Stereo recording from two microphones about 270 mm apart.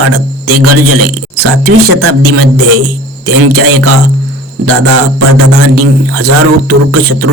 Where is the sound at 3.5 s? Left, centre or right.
Right.